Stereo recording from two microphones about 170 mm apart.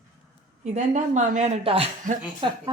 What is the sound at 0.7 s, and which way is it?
Speech, 45° right (ahead or behind).